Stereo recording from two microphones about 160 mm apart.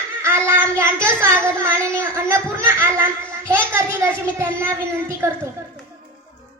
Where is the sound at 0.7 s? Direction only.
15° right (ahead or behind).